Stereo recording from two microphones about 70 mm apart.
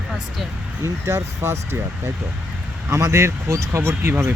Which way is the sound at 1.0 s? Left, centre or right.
Right.